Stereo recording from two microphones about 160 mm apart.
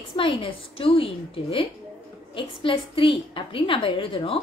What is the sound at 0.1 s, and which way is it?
A woman's voice, 35° left (ahead or behind).